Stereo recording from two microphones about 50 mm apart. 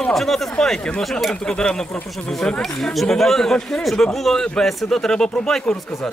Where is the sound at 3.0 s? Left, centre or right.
Centre.